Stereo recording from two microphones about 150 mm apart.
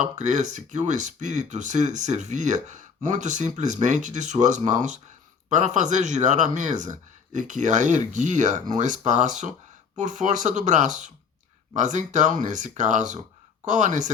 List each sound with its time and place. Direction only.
0.0 s speech: 55° right (ahead or behind)